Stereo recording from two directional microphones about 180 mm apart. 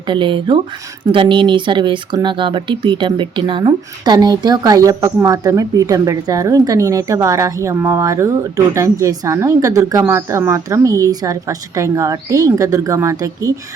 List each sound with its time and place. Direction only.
0.1 s speech: 25° right (ahead or behind)